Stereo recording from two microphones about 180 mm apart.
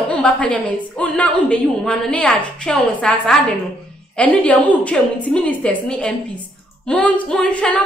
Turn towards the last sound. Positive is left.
turn(degrees=5)  # may be behind; listen again after turning